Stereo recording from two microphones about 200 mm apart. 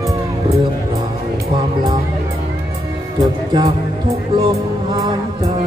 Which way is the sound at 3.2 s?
20° right (ahead or behind).